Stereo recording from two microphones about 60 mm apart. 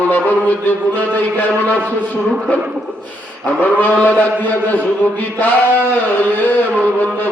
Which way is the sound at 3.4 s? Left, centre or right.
Left.